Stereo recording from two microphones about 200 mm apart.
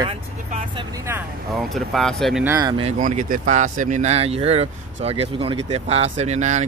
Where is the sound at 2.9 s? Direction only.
40° right (ahead or behind).